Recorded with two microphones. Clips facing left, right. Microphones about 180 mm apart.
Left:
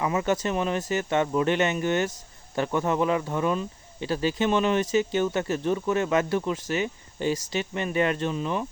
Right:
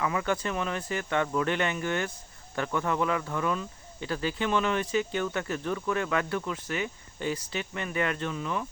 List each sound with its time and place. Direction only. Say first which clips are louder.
0.0 s speech: left 4 dB; 25° left (ahead or behind)